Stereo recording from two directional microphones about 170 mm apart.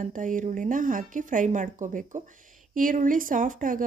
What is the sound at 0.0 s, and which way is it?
A woman's voice, 50° right (ahead or behind).